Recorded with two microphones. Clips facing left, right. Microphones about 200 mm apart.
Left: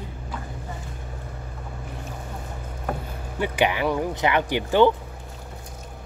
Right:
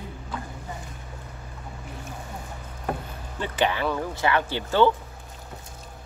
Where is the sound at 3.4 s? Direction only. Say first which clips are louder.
Left 2 dB; 15° left (ahead or behind).